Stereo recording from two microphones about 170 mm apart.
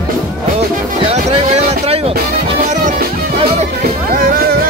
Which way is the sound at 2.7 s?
45° right (ahead or behind).